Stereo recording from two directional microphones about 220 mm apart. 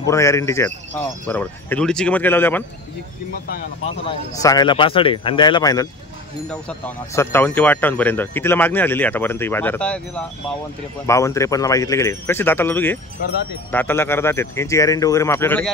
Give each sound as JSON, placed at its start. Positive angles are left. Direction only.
{"t": 0.0, "sound": "speech", "side_deg": 15}
{"t": 3.8, "sound": "speech", "side_deg": 25}